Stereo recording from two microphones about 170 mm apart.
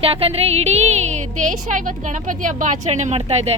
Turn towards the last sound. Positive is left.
turn(degrees=-40)  # may be behind; listen again after turning